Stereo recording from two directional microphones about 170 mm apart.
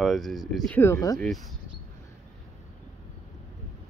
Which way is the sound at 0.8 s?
15° left (ahead or behind).